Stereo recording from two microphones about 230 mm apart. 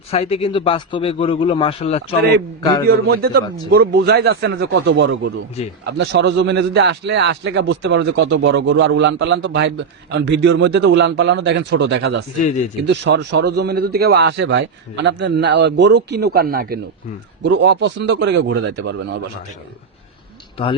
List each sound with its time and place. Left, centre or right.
0.1 s a man's voice: left
2.8 s a man's voice: right